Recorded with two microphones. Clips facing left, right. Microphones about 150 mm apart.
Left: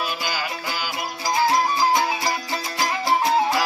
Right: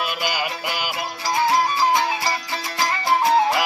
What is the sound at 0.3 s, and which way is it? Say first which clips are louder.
Music: right 2 dB; 15° right (ahead or behind).